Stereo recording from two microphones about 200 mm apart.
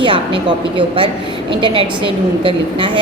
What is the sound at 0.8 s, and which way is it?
Speech, 25° right (ahead or behind).